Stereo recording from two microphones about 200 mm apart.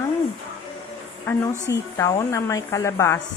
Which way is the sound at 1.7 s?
15° left (ahead or behind).